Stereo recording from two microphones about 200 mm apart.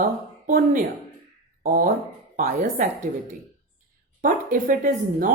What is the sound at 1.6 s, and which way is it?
Speech, 45° right (ahead or behind).